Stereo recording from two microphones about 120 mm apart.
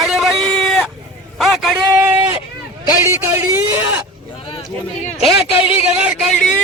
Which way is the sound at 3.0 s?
25° right (ahead or behind).